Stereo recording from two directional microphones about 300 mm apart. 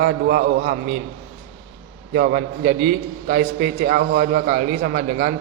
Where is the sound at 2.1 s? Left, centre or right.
Right.